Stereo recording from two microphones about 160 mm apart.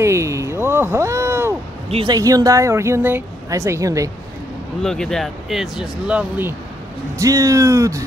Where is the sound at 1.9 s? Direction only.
35° right (ahead or behind).